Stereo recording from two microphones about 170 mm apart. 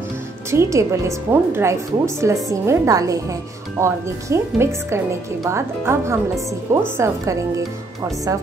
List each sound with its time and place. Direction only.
0.5 s a woman's voice: 15° right (ahead or behind)